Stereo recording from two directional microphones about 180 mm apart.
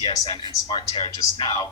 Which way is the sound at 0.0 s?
30° left (ahead or behind).